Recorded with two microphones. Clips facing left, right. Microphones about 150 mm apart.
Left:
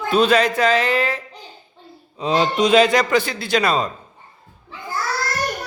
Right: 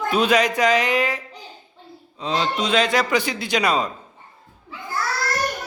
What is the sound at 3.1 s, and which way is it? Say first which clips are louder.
Speech: left 3 dB; 15° right (ahead or behind).